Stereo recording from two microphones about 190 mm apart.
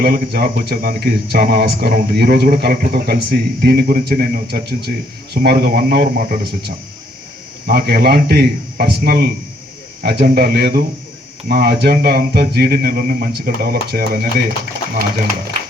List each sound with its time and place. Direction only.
0.0 s speech: 55° right (ahead or behind)